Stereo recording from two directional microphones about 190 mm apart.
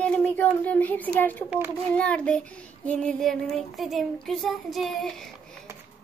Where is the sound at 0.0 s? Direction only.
5° left (ahead or behind).